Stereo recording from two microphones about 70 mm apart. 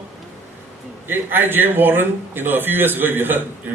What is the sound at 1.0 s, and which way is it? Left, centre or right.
A man's voice, right.